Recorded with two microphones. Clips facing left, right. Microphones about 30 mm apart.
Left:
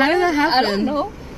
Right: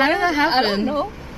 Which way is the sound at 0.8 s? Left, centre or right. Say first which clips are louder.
Left 1 dB; centre.